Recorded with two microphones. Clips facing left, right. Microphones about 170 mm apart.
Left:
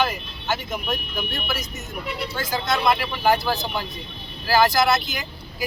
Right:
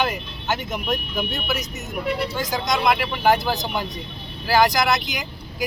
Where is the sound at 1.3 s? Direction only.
20° right (ahead or behind).